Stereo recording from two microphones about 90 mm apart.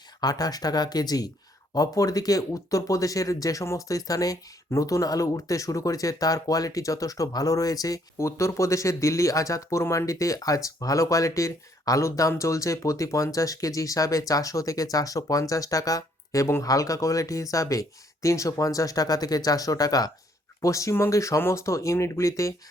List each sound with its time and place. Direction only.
0.2 s speech: 45° left (ahead or behind)